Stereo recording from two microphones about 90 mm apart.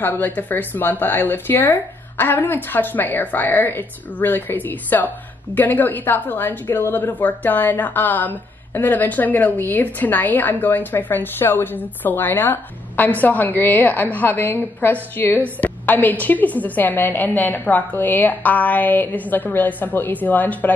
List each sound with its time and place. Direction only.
0.0 s speech: 20° left (ahead or behind)